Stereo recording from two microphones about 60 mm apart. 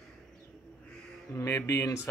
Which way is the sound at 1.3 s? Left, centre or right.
Left.